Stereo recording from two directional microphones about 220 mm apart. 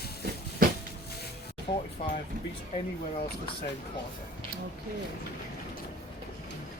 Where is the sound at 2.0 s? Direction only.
30° left (ahead or behind).